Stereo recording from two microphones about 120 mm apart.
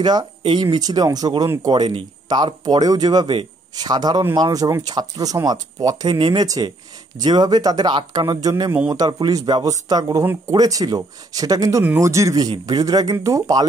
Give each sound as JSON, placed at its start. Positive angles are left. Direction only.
{"t": 0.0, "sound": "speech", "side_deg": -35}
{"t": 11.8, "sound": "speech", "side_deg": -20}